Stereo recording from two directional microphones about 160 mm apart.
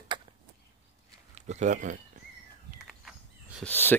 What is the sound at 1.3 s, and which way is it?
Speech, 45° right (ahead or behind).